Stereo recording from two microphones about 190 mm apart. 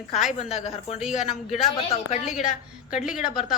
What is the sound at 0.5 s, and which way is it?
Speech, 35° left (ahead or behind).